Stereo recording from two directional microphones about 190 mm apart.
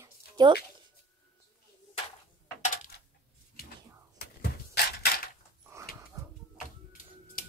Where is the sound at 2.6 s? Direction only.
45° left (ahead or behind).